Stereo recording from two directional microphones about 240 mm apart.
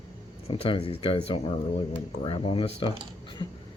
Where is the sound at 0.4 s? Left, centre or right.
Left.